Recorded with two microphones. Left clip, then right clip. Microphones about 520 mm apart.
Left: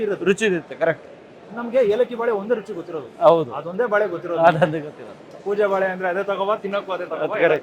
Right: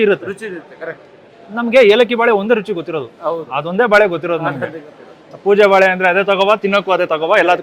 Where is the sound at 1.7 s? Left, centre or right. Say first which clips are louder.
Right 9 dB; right.